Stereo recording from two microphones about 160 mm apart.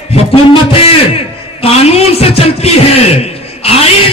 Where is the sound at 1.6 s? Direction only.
40° left (ahead or behind).